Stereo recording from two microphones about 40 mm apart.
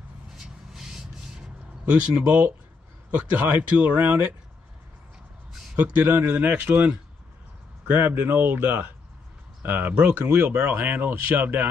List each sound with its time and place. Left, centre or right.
1.9 s speech: right
3.1 s speech: right
5.8 s speech: right
7.8 s speech: right